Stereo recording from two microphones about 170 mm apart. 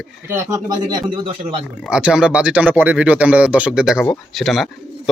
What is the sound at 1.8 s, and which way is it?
Speech, 5° right (ahead or behind).